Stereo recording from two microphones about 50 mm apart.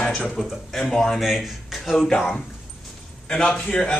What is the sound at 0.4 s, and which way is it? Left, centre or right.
Speech, centre.